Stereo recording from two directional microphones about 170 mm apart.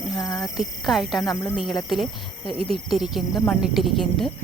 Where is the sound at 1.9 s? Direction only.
Centre (ahead or behind).